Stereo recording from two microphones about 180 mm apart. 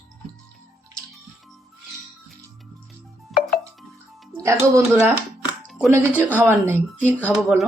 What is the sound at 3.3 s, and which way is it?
Music, centre (ahead or behind).